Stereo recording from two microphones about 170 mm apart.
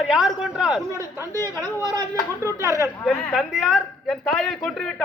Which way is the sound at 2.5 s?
20° right (ahead or behind).